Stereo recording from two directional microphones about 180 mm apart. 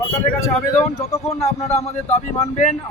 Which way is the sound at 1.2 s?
35° left (ahead or behind).